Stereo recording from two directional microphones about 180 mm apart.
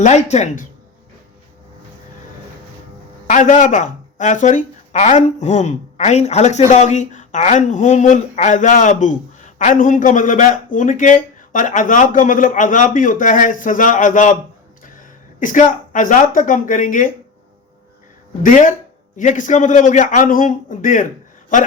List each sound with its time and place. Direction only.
0.0 s speech: 40° left (ahead or behind)
3.2 s speech: 45° left (ahead or behind)
18.4 s speech: 45° left (ahead or behind)